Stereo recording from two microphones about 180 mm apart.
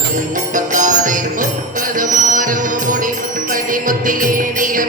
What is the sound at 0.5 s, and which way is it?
Music, 45° right (ahead or behind).